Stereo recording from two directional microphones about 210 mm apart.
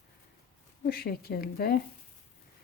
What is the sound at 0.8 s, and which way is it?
Speech, 45° left (ahead or behind).